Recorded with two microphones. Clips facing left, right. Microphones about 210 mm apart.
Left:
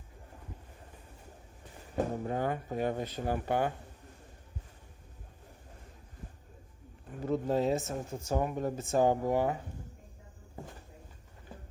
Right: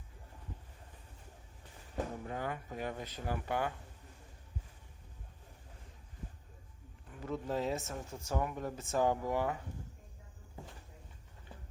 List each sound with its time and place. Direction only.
2.0 s speech: 40° left (ahead or behind)
7.1 s speech: 40° left (ahead or behind)